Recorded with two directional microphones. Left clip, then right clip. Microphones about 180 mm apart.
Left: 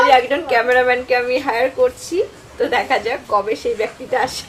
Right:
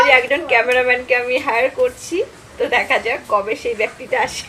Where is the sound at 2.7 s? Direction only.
15° left (ahead or behind).